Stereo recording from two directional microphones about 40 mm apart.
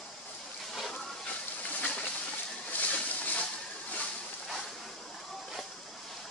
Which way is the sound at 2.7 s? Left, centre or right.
Left.